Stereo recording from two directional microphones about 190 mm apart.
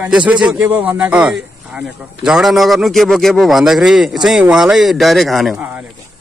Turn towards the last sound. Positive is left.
turn(degrees=0)  # may be behind; listen again after turning